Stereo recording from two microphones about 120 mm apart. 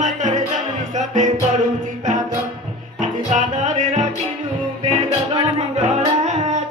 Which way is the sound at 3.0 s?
90° right.